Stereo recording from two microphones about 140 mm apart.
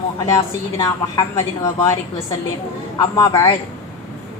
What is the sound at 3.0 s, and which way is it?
Speech, 25° left (ahead or behind).